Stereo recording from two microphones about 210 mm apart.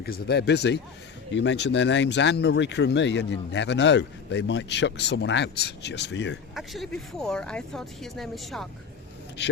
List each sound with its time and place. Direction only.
0.0 s speech: 50° left (ahead or behind)
6.5 s speech: centre (ahead or behind)